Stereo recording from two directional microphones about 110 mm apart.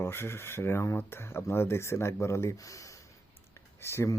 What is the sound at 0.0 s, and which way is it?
Speech, 20° left (ahead or behind).